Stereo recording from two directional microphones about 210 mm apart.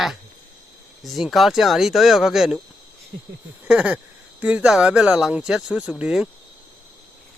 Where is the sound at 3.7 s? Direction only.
5° right (ahead or behind).